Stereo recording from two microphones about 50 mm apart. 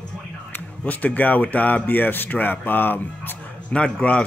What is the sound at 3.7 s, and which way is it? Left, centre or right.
Speech, left.